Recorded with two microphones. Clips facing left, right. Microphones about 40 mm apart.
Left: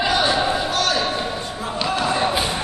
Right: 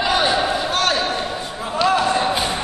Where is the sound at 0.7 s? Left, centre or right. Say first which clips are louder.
Right 2 dB; right.